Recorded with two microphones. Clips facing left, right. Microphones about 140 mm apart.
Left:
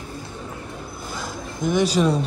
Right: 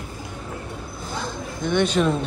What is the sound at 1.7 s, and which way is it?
Speech, centre (ahead or behind).